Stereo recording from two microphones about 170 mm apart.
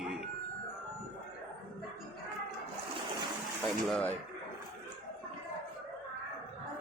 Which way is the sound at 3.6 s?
Centre (ahead or behind).